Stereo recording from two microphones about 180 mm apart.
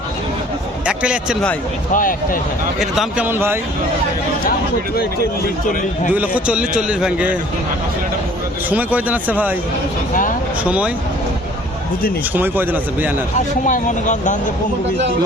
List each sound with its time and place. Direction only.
0.9 s speech: 5° right (ahead or behind)
1.9 s speech: 50° left (ahead or behind)
2.7 s a man's voice: centre (ahead or behind)
6.1 s a man's voice: 10° right (ahead or behind)
8.7 s a man's voice: 10° right (ahead or behind)
10.6 s a man's voice: 5° right (ahead or behind)
12.3 s a man's voice: 10° right (ahead or behind)
13.7 s speech: 45° left (ahead or behind)